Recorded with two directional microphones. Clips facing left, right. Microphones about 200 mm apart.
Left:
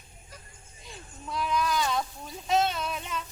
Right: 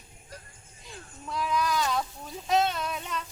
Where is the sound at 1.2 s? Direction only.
Centre (ahead or behind).